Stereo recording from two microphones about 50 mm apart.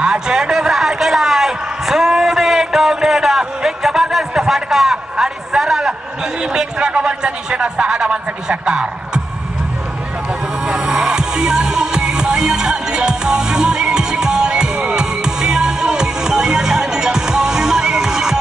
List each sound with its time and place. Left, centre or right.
0.0 s a sound: centre
6.4 s a man's voice: centre
10.7 s music: centre